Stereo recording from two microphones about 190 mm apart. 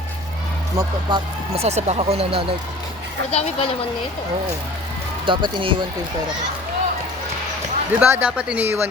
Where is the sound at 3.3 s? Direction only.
35° left (ahead or behind).